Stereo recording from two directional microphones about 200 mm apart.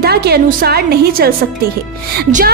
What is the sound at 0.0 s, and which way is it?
A woman's voice, 55° right (ahead or behind).